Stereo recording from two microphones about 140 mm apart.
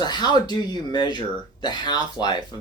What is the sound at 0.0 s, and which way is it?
Speech, 30° left (ahead or behind).